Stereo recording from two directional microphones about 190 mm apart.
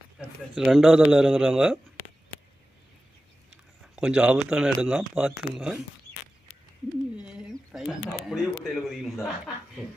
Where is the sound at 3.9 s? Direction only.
5° right (ahead or behind).